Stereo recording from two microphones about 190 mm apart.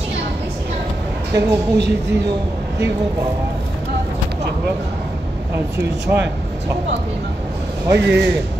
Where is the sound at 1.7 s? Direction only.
65° right (ahead or behind).